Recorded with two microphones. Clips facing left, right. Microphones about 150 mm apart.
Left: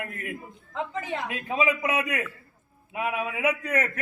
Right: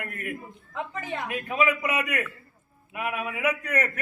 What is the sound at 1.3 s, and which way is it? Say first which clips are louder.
A man's voice: right 1 dB; 25° left (ahead or behind).